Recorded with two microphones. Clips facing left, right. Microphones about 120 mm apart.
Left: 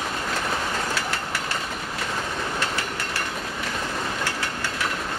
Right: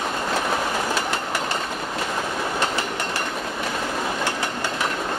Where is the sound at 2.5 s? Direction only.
20° right (ahead or behind).